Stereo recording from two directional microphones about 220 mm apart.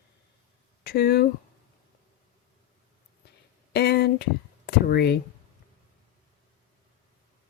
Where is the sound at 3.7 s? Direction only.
45° left (ahead or behind).